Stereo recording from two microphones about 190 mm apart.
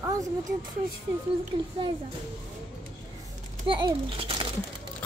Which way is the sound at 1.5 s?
25° right (ahead or behind).